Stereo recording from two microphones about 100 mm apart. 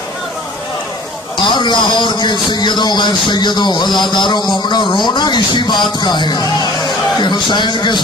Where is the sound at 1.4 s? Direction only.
50° left (ahead or behind).